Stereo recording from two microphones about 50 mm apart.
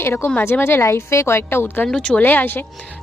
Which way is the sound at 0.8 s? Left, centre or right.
Left.